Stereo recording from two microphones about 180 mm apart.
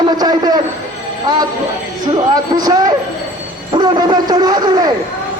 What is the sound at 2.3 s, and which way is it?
A man's voice, 20° right (ahead or behind).